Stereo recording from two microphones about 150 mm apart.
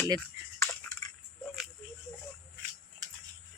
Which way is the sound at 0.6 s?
15° left (ahead or behind).